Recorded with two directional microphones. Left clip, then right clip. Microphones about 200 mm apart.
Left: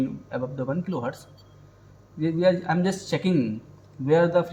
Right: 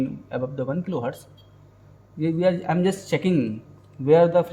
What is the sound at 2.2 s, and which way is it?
Speech, 25° right (ahead or behind).